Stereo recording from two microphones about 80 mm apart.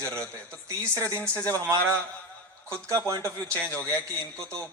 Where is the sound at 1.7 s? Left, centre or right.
Right.